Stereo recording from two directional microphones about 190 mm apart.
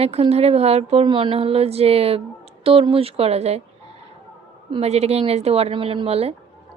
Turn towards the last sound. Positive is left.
turn(degrees=-30)  # may be behind; listen again after turning